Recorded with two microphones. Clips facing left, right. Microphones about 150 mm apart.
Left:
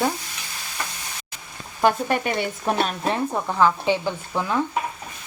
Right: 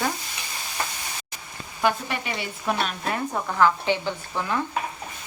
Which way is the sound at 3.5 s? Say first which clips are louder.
Left 1 dB; 15° left (ahead or behind).